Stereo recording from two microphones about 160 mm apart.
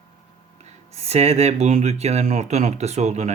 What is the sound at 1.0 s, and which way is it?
Speech, 40° right (ahead or behind).